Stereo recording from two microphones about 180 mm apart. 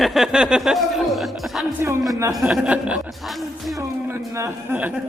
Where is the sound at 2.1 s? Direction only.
20° right (ahead or behind).